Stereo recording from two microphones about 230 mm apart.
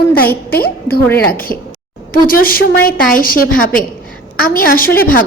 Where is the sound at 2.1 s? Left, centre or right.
Left.